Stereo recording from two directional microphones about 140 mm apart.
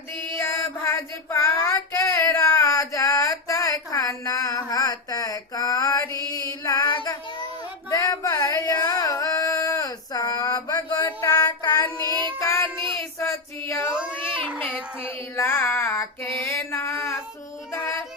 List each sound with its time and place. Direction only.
0.3 s child singing: 15° left (ahead or behind)
7.9 s music: 25° left (ahead or behind)
12.4 s child singing: 20° left (ahead or behind)
14.1 s cat: 15° left (ahead or behind)
15.4 s a sound: 15° left (ahead or behind)